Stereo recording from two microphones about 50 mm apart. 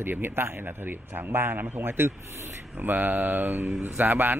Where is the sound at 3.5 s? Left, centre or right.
Right.